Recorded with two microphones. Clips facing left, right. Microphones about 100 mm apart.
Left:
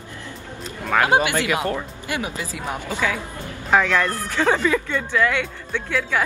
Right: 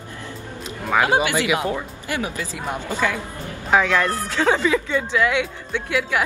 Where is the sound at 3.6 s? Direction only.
15° right (ahead or behind).